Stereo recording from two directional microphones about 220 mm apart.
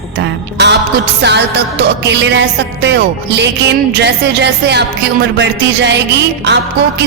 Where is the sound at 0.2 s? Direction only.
50° right (ahead or behind).